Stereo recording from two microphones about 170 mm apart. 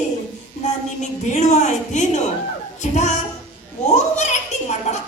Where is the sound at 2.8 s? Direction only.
45° left (ahead or behind).